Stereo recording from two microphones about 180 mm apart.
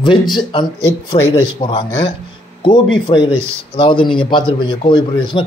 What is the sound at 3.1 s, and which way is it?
Speech, 25° left (ahead or behind).